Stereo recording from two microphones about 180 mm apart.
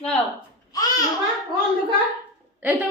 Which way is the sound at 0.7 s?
20° left (ahead or behind).